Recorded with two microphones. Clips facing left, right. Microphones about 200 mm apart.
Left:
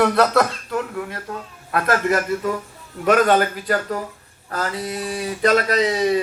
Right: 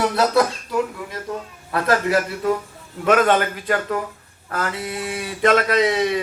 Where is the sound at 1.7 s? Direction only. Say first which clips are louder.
Right 1 dB; 50° left (ahead or behind).